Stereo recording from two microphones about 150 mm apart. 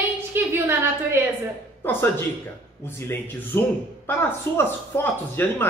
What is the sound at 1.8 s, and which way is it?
Speech, 15° left (ahead or behind).